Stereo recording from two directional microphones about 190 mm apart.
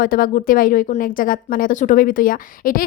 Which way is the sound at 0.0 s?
50° left (ahead or behind).